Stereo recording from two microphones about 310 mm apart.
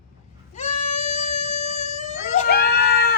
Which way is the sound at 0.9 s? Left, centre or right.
Centre.